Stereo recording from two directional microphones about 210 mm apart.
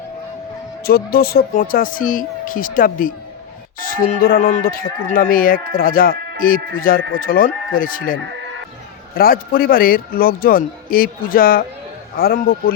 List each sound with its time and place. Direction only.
0.9 s a man's voice: 45° left (ahead or behind)